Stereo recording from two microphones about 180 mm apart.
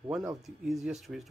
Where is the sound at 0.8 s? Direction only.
Centre (ahead or behind).